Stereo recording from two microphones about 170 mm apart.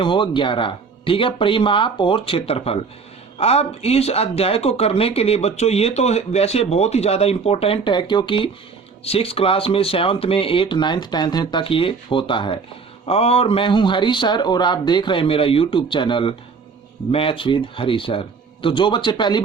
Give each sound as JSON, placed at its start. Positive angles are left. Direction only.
{"t": 0.0, "sound": "speech", "side_deg": 30}